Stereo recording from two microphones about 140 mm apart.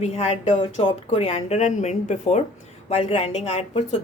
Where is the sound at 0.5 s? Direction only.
40° left (ahead or behind).